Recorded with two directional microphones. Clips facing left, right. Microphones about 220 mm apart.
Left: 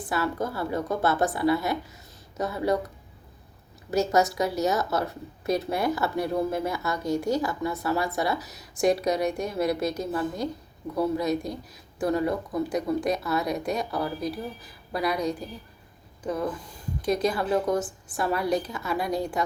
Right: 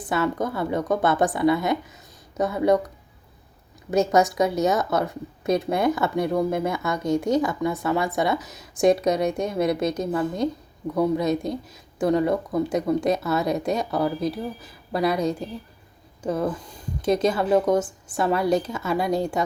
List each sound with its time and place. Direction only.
0.1 s speech: 20° right (ahead or behind)
4.4 s speech: 20° right (ahead or behind)
17.1 s speech: 25° right (ahead or behind)